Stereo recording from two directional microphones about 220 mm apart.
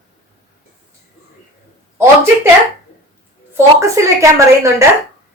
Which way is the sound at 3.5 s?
15° right (ahead or behind).